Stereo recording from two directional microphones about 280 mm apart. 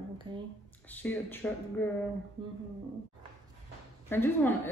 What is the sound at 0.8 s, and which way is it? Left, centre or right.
Speech, centre.